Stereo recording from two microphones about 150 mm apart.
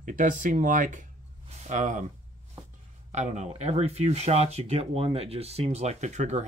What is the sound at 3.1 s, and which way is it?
Speech, 50° right (ahead or behind).